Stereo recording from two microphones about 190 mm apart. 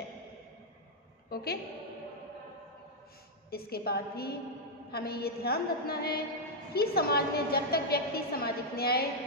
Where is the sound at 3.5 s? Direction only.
55° left (ahead or behind).